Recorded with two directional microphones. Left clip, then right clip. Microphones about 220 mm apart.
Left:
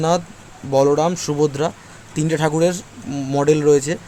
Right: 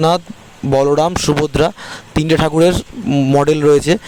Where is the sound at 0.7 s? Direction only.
45° right (ahead or behind).